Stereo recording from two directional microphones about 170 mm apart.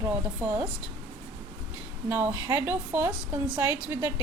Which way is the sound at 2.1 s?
10° right (ahead or behind).